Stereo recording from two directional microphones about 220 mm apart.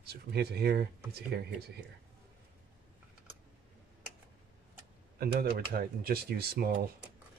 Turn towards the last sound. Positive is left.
turn(degrees=-45)  # may be behind; listen again after turning